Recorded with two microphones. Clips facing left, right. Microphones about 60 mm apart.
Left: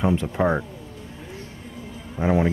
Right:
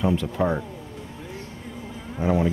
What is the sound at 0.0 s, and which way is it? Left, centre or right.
Speech, left.